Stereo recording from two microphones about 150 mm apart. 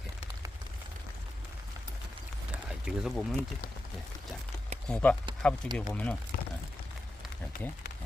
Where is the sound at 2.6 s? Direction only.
5° right (ahead or behind).